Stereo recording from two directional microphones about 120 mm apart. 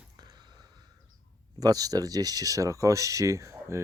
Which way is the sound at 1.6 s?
30° right (ahead or behind).